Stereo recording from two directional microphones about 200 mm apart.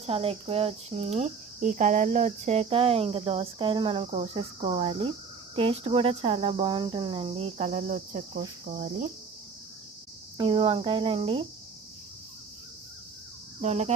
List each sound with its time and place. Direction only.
0.0 s speech: 30° right (ahead or behind)
8.6 s cricket: 40° right (ahead or behind)
10.3 s speech: 25° right (ahead or behind)
13.6 s cricket: 35° right (ahead or behind)